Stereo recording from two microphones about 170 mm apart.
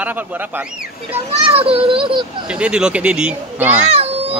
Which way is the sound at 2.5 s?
5° right (ahead or behind).